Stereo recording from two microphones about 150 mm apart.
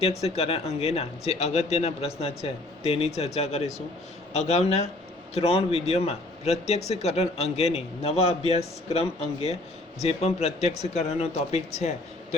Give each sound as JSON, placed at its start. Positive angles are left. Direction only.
{"t": 0.2, "sound": "a man's voice", "side_deg": 45}